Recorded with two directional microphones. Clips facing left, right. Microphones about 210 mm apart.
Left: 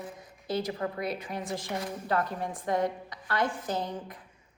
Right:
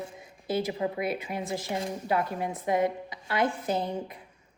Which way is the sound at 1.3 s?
25° right (ahead or behind).